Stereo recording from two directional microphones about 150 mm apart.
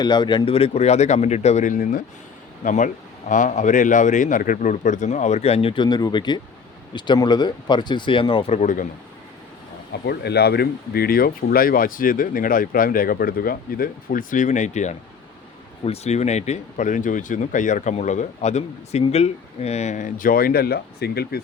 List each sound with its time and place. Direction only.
0.0 s speech: 30° left (ahead or behind)
8.5 s speech: 55° left (ahead or behind)
10.1 s speech: 90° left